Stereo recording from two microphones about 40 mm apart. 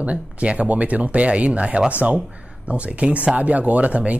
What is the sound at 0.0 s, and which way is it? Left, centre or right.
Speech, right.